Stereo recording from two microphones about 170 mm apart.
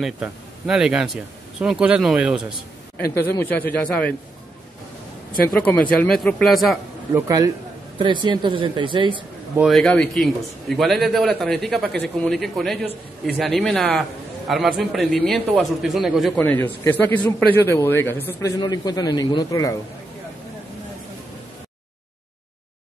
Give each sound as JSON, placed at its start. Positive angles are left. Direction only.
{"t": 0.0, "sound": "a man's voice", "side_deg": -5}
{"t": 3.2, "sound": "speech", "side_deg": 15}
{"t": 5.5, "sound": "speech", "side_deg": 10}
{"t": 7.2, "sound": "speech", "side_deg": -20}
{"t": 9.6, "sound": "a man's voice", "side_deg": 0}
{"t": 16.3, "sound": "speech", "side_deg": 10}
{"t": 18.6, "sound": "a man's voice", "side_deg": 25}